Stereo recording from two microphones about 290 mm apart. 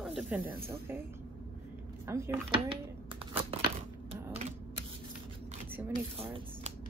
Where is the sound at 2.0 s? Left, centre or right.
Centre.